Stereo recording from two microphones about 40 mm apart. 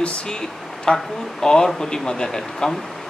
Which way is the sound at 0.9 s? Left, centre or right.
Left.